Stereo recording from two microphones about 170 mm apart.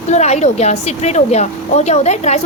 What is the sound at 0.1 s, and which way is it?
A woman's voice, 40° left (ahead or behind).